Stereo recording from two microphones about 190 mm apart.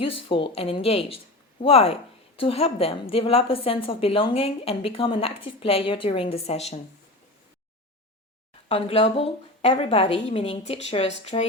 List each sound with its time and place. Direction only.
0.0 s speech: 25° left (ahead or behind)
8.7 s a woman's voice: 30° left (ahead or behind)